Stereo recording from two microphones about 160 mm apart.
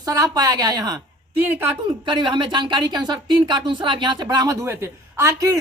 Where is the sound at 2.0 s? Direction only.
30° right (ahead or behind).